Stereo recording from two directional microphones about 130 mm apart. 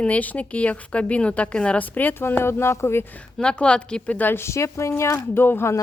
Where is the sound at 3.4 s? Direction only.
5° left (ahead or behind).